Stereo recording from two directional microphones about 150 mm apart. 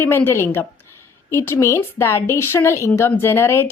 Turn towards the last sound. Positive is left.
turn(degrees=15)  # may be behind; listen again after turning